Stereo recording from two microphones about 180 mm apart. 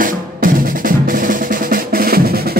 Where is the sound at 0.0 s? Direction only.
50° right (ahead or behind).